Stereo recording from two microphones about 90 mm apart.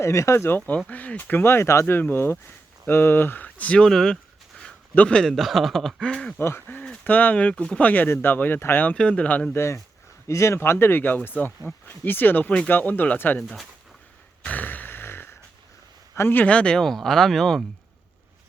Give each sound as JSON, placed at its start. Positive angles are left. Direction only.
{"t": 0.0, "sound": "speech", "side_deg": 35}
{"t": 0.9, "sound": "speech", "side_deg": 20}
{"t": 6.4, "sound": "speech", "side_deg": 25}
{"t": 9.6, "sound": "speech", "side_deg": 30}
{"t": 14.4, "sound": "a sound", "side_deg": 20}
{"t": 16.1, "sound": "speech", "side_deg": 25}